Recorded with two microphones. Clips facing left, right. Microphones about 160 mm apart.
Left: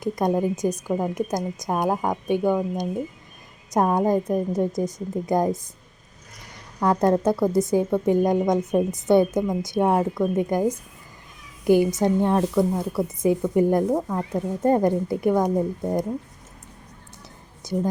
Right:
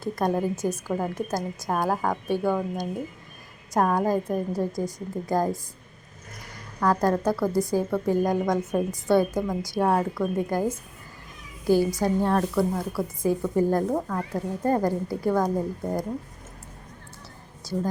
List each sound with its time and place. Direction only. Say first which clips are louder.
0.0 s a woman's voice: left 3 dB; 15° left (ahead or behind)
6.7 s a woman's voice: left 3 dB; 20° left (ahead or behind)
17.6 s a woman's voice: left 3 dB; 20° left (ahead or behind)